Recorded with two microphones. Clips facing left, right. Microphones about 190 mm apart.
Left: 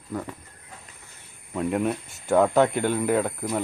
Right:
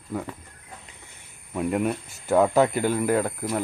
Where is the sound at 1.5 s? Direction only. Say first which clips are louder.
Even; centre (ahead or behind).